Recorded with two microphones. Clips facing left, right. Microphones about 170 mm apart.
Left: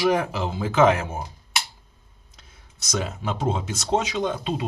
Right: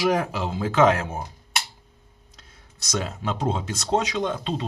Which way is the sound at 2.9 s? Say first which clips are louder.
Even; centre (ahead or behind).